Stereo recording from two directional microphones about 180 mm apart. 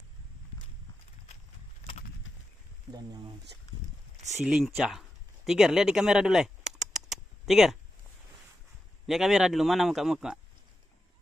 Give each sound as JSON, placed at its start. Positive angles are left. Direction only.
{"t": 2.9, "sound": "speech", "side_deg": -20}
{"t": 4.4, "sound": "a sound", "side_deg": 0}
{"t": 9.0, "sound": "a man's voice", "side_deg": 0}